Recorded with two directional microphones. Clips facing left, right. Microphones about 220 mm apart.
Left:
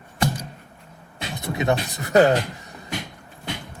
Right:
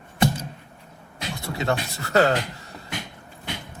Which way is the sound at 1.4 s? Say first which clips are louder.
Left 3 dB; 20° left (ahead or behind).